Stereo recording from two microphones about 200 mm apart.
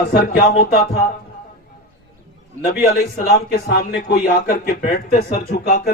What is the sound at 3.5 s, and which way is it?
Speech, 45° left (ahead or behind).